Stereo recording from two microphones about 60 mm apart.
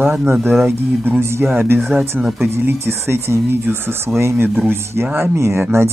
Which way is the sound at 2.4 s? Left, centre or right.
Right.